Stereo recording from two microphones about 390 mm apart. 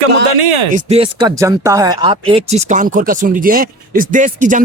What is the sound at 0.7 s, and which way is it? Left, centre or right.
Speech, centre.